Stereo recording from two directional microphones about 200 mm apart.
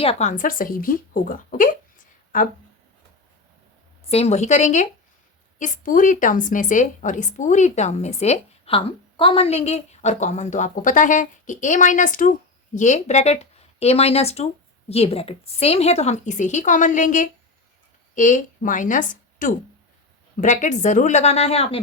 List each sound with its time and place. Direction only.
0.0 s speech: 30° left (ahead or behind)
4.1 s a woman's voice: 30° left (ahead or behind)